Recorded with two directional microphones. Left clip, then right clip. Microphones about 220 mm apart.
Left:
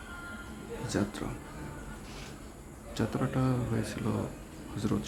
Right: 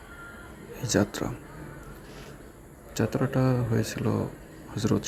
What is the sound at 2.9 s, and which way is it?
Speech, 20° right (ahead or behind).